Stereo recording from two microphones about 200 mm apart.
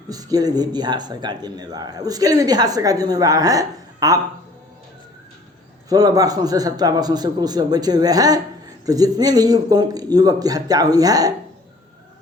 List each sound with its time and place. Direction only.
0.1 s a man's voice: 20° right (ahead or behind)
5.9 s a man's voice: 20° right (ahead or behind)